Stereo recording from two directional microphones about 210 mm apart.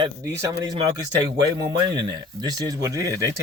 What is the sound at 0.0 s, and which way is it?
Speech, 15° right (ahead or behind).